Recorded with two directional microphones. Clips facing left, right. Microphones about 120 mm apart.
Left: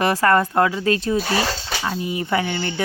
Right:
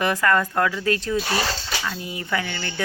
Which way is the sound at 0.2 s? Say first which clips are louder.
Left 4 dB; 35° left (ahead or behind).